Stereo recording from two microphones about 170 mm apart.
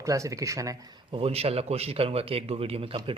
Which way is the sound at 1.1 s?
35° right (ahead or behind).